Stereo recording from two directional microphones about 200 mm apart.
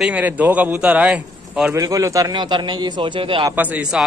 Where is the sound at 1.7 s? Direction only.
15° right (ahead or behind).